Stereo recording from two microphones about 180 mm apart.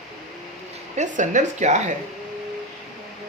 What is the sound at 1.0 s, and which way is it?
Speech, 40° right (ahead or behind).